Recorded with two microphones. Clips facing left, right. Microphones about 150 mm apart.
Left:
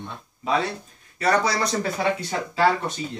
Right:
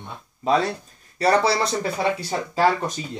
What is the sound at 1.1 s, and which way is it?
Speech, 30° right (ahead or behind).